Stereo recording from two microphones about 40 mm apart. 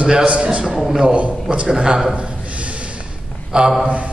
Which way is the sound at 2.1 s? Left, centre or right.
Right.